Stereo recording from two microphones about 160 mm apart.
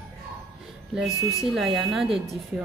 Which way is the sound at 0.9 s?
5° right (ahead or behind).